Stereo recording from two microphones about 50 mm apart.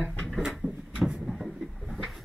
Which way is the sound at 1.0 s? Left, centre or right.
Centre.